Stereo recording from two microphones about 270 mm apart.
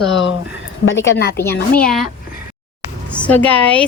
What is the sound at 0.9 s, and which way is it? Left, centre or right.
Speech, left.